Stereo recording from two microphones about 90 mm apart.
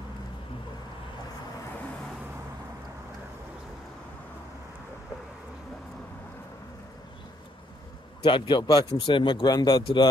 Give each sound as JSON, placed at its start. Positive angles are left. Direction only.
{"t": 8.2, "sound": "speech", "side_deg": 65}
{"t": 9.0, "sound": "speech", "side_deg": 65}